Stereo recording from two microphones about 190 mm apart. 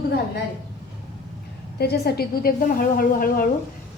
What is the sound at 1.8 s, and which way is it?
A woman's voice, 55° left (ahead or behind).